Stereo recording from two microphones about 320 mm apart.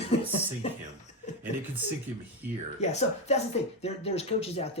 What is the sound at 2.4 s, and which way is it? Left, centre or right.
Speech, centre.